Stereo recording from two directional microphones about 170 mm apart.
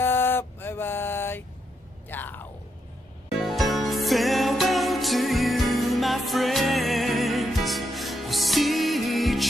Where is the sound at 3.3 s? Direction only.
Centre (ahead or behind).